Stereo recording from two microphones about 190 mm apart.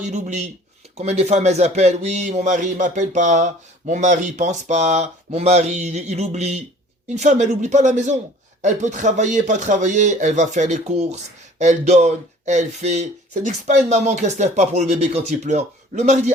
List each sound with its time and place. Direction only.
0.0 s a man's voice: 40° right (ahead or behind)